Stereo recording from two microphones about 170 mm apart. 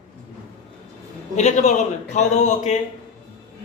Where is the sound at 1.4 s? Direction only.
40° left (ahead or behind).